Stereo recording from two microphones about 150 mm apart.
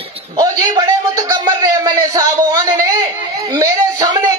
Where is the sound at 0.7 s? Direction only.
25° right (ahead or behind).